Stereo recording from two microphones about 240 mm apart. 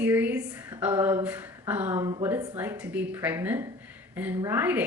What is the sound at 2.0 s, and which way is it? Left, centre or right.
Speech, right.